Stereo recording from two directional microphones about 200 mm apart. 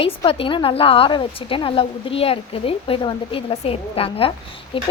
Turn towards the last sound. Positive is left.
turn(degrees=25)  # may be behind; listen again after turning